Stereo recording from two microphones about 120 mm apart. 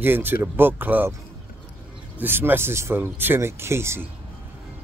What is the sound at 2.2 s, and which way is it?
Speech, 15° right (ahead or behind).